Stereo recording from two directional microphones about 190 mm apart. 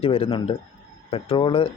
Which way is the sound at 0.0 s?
30° left (ahead or behind).